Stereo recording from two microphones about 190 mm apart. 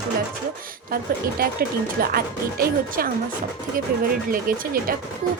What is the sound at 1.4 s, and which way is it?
A woman's voice, 50° right (ahead or behind).